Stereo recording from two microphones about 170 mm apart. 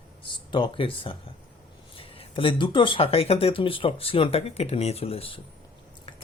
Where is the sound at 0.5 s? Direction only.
30° left (ahead or behind).